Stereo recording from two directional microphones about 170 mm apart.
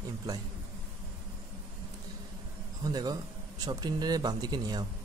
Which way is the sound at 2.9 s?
25° right (ahead or behind).